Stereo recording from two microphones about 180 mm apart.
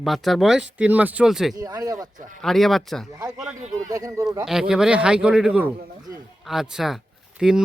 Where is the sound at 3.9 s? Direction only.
20° right (ahead or behind).